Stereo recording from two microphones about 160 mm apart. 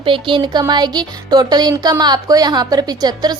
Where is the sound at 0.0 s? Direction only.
30° right (ahead or behind).